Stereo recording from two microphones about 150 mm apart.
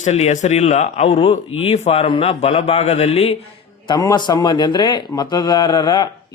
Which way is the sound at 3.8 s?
25° left (ahead or behind).